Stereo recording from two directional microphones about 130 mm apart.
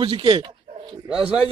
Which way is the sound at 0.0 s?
45° right (ahead or behind).